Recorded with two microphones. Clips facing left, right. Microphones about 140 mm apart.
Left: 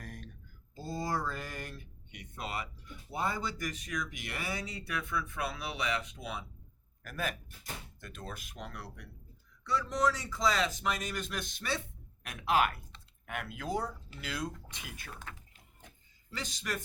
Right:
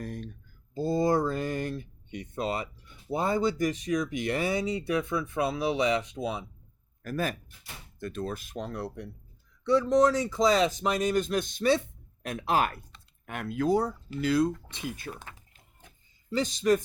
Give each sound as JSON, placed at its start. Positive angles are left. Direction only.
{"t": 0.0, "sound": "a sound", "side_deg": -30}
{"t": 3.1, "sound": "speech", "side_deg": -25}
{"t": 7.0, "sound": "speech", "side_deg": -35}
{"t": 10.3, "sound": "speech", "side_deg": -20}